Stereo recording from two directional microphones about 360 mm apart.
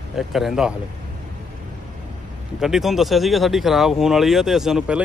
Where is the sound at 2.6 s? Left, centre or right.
Centre.